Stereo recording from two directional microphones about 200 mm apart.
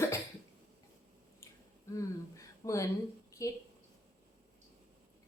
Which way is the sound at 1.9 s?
15° left (ahead or behind).